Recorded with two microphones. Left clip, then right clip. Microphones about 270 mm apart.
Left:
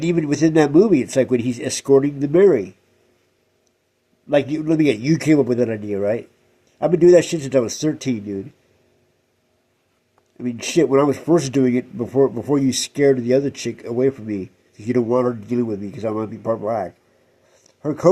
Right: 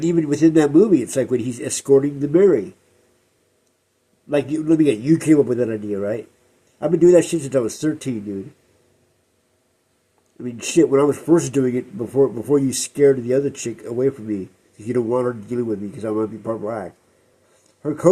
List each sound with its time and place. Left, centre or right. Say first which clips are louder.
0.0 s speech: right 2 dB; left
4.3 s speech: left 1 dB; left
10.3 s speech: right 1 dB; left